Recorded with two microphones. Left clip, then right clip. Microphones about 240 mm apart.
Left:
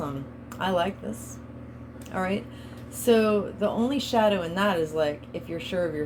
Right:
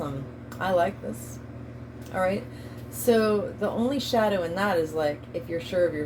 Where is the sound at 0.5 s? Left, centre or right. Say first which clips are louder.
Right 2 dB; left.